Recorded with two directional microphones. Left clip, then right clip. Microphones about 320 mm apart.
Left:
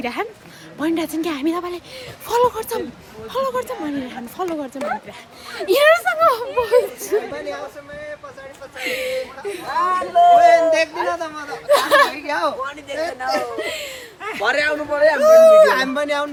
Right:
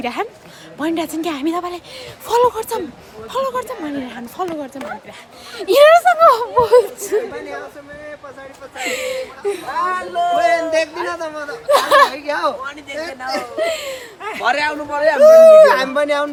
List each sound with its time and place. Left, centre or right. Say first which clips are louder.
0.0 s a man's voice: right 2 dB; centre
5.5 s a man's voice: right 5 dB; centre
8.8 s a man's voice: right 1 dB; centre
9.7 s a man's voice: left 5 dB; centre
13.6 s a man's voice: right 6 dB; centre